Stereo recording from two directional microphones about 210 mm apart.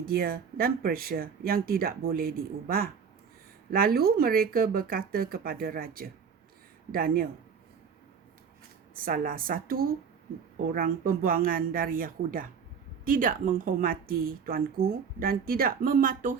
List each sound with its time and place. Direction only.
0.0 s a woman's voice: 45° right (ahead or behind)
9.0 s a woman's voice: 40° right (ahead or behind)